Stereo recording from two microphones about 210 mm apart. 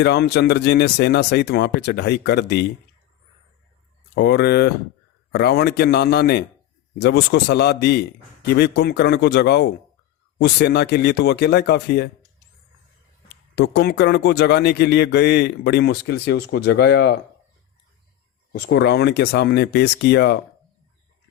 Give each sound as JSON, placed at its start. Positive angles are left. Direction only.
{"t": 0.0, "sound": "a man's voice", "side_deg": 50}
{"t": 4.1, "sound": "a man's voice", "side_deg": 55}
{"t": 13.2, "sound": "a man's voice", "side_deg": 50}
{"t": 18.5, "sound": "a man's voice", "side_deg": 50}